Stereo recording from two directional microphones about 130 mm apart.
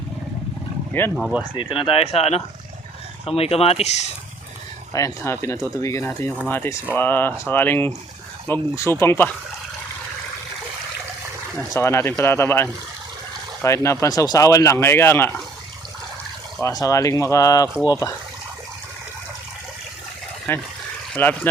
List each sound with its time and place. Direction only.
1.1 s speech: 5° right (ahead or behind)
1.5 s speech: 45° left (ahead or behind)
4.9 s speech: 20° left (ahead or behind)
11.7 s speech: 20° left (ahead or behind)
16.6 s speech: 25° left (ahead or behind)
20.5 s speech: 15° left (ahead or behind)